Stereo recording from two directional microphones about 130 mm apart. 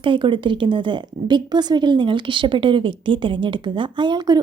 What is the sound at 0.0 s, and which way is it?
A woman's voice, 40° right (ahead or behind).